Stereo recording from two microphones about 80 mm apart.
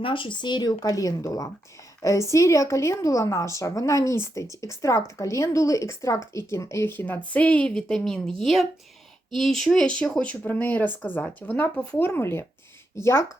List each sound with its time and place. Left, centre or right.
0.0 s a woman's voice: left